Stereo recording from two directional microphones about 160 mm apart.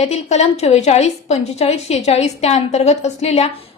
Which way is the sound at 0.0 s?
45° left (ahead or behind).